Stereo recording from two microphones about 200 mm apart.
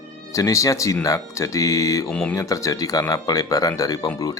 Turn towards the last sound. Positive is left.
turn(degrees=15)  # may be behind; listen again after turning